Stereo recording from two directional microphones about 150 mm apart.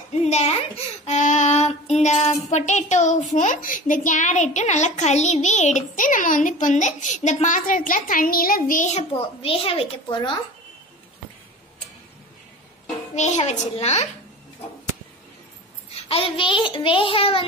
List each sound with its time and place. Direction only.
0.2 s speech: 45° left (ahead or behind)
13.1 s speech: 50° left (ahead or behind)
15.9 s a child's voice: 40° left (ahead or behind)